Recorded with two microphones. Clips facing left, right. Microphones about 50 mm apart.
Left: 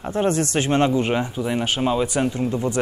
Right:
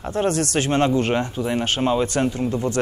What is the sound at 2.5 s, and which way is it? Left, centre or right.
Speech, left.